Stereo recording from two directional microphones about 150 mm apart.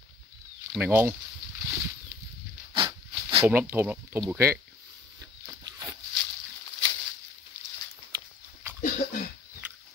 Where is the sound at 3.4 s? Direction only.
15° right (ahead or behind).